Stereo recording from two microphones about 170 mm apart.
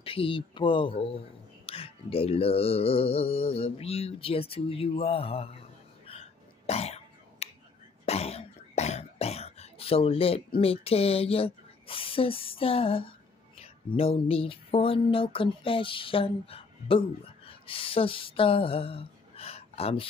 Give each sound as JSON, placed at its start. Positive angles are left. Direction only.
{"t": 0.0, "sound": "speech", "side_deg": 35}
{"t": 1.7, "sound": "mantra", "side_deg": 35}
{"t": 8.0, "sound": "cough", "side_deg": 40}
{"t": 13.6, "sound": "speech", "side_deg": 35}
{"t": 17.5, "sound": "a sound", "side_deg": 30}